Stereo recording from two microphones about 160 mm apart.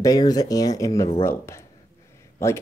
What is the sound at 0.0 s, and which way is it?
Speech, 25° left (ahead or behind).